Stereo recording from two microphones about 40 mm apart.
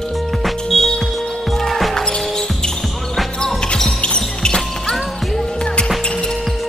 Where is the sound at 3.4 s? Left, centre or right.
Centre.